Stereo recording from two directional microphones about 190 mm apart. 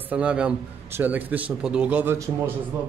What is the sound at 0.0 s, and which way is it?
A man's voice, 5° right (ahead or behind).